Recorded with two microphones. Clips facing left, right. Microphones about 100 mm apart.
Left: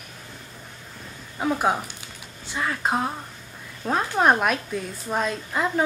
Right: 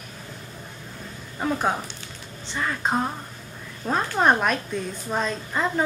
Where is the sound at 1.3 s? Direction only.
10° left (ahead or behind).